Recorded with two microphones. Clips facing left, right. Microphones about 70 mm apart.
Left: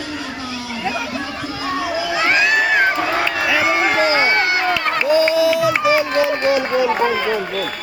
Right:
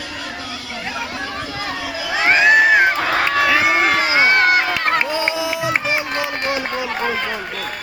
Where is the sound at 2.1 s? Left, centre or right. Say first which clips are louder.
Right 4 dB; right.